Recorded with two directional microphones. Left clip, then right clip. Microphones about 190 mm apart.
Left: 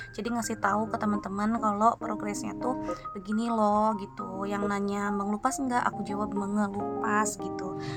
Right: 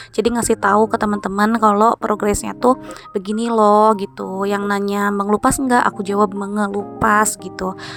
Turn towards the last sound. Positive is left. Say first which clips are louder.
# right 11 dB
turn(degrees=-55)  # may be behind; listen again after turning